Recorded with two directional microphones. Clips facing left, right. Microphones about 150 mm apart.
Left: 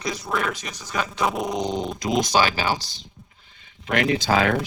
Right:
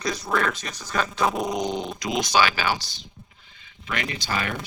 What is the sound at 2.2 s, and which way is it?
Speech, 40° left (ahead or behind).